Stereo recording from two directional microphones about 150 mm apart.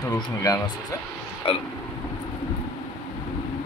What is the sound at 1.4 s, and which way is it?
Hiccup, 35° left (ahead or behind).